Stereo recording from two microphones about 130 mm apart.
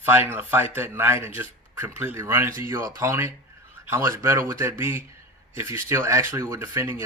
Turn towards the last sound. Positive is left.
turn(degrees=-20)  # may be behind; listen again after turning